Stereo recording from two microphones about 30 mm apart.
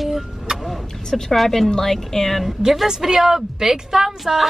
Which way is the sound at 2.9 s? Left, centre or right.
Centre.